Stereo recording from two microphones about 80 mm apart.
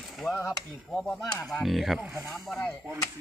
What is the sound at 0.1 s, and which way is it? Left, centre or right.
Speech, centre.